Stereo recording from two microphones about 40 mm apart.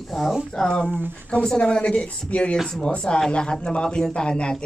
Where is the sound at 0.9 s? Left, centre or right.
Right.